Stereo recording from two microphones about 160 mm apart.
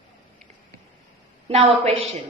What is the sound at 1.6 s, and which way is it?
Speech, 40° right (ahead or behind).